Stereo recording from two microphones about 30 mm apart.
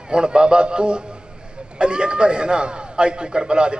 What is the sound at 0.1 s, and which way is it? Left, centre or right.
A man's voice, right.